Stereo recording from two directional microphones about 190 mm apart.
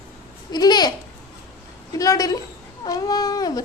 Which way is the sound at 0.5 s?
20° left (ahead or behind).